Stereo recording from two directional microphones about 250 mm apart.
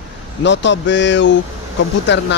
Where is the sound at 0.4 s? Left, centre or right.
Left.